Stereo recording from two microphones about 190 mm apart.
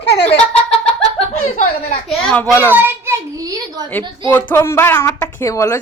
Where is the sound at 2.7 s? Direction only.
10° right (ahead or behind).